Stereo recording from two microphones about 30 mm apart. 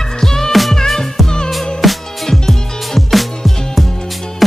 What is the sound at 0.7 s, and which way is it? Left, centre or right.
Music, centre.